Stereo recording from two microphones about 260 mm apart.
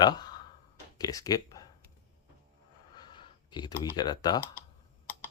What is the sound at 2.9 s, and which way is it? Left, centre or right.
Speech, centre.